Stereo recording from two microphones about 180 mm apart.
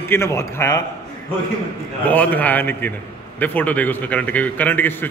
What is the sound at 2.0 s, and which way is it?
A man's voice, 10° left (ahead or behind).